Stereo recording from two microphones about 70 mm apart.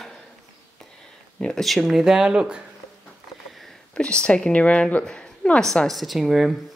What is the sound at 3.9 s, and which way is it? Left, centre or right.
Speech, centre.